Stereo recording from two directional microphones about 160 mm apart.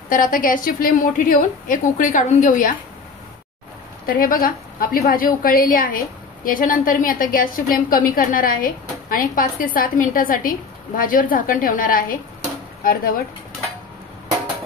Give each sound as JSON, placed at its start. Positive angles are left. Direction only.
{"t": 0.1, "sound": "a woman's voice", "side_deg": 60}
{"t": 4.0, "sound": "a woman's voice", "side_deg": 60}